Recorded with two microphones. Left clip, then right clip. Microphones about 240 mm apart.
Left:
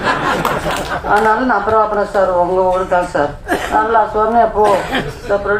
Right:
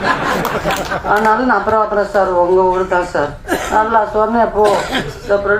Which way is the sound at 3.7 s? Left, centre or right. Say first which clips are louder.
Even; right.